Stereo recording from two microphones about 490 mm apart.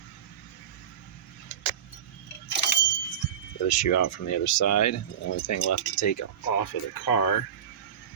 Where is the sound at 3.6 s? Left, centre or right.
Left.